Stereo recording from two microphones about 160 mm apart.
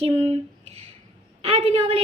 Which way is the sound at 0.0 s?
40° right (ahead or behind).